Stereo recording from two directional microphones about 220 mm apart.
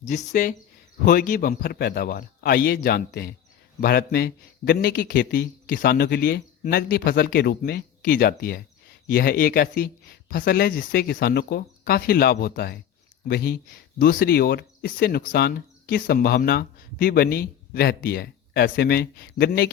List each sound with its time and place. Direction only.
0.0 s a man's voice: 30° left (ahead or behind)